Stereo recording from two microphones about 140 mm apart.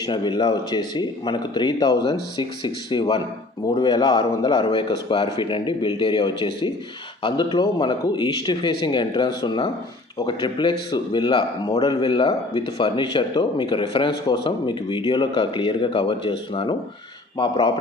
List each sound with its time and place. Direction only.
0.0 s speech: 35° left (ahead or behind)